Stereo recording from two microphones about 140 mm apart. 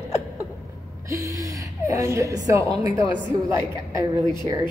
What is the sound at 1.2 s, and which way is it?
A woman's voice, 25° right (ahead or behind).